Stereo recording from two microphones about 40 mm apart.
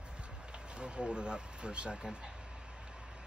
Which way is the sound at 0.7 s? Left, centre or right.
Right.